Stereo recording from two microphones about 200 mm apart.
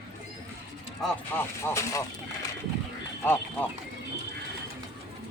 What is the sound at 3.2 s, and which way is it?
Speech, 10° left (ahead or behind).